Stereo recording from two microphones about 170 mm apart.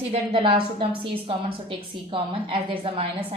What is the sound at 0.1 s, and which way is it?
A woman's voice, 40° right (ahead or behind).